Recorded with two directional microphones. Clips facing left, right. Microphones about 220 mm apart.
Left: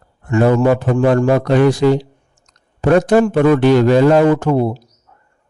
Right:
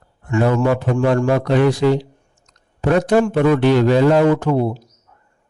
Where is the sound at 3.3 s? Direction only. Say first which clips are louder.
Left 3 dB; 50° left (ahead or behind).